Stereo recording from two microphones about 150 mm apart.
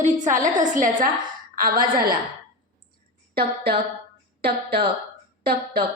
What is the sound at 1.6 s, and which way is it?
Speech, 70° right (ahead or behind).